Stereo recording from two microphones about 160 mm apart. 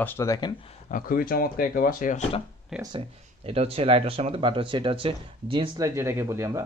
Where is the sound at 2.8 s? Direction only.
30° right (ahead or behind).